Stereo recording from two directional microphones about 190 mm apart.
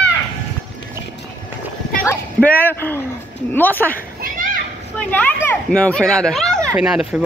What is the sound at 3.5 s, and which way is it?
Speech, 10° left (ahead or behind).